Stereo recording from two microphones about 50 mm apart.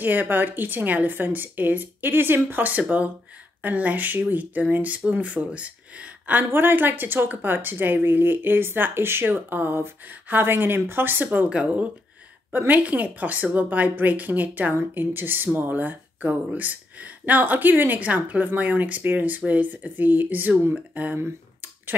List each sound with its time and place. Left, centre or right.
0.0 s speech: right
6.2 s speech: right
11.4 s speech: right
14.7 s speech: right